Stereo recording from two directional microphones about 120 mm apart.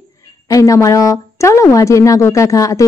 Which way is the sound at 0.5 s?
25° left (ahead or behind).